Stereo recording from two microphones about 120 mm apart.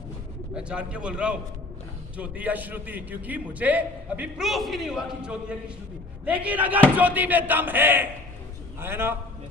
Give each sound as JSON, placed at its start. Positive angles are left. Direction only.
{"t": 0.5, "sound": "a man's voice", "side_deg": -10}
{"t": 4.4, "sound": "a man's voice", "side_deg": 0}